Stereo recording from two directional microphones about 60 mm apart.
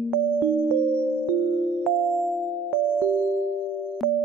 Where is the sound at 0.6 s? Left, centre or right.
Centre.